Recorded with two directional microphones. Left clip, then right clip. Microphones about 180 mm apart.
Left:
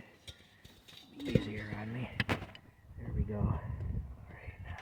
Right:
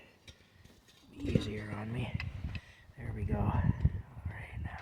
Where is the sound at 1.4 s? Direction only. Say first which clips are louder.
Right 1 dB; 60° right (ahead or behind).